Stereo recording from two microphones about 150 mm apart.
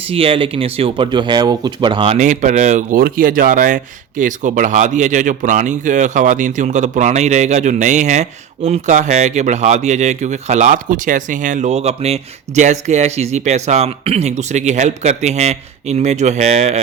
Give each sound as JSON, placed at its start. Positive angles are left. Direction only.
{"t": 0.1, "sound": "speech", "side_deg": -40}
{"t": 2.1, "sound": "speech", "side_deg": -55}